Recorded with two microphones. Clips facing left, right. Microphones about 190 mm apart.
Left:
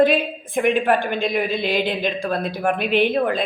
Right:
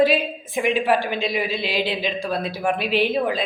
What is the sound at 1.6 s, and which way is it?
Speech, 50° left (ahead or behind).